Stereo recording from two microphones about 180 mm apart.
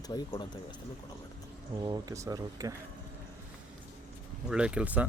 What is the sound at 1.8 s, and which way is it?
Speech, 20° right (ahead or behind).